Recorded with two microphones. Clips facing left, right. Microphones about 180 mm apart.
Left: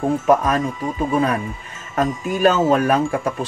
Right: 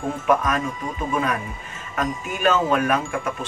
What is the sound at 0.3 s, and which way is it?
Speech, 35° left (ahead or behind).